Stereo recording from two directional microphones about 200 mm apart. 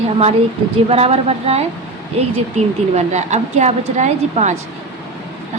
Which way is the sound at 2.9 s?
35° right (ahead or behind).